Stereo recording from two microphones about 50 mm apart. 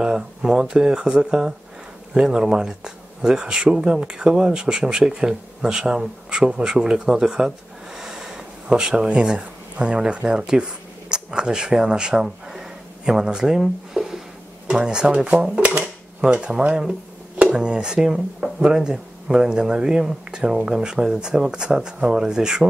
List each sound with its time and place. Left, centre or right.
0.4 s speech: centre